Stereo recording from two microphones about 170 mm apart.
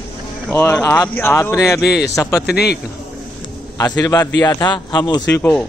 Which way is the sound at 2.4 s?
70° left (ahead or behind).